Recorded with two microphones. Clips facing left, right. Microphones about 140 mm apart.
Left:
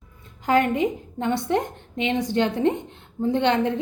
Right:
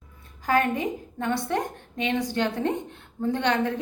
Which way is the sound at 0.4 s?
20° left (ahead or behind).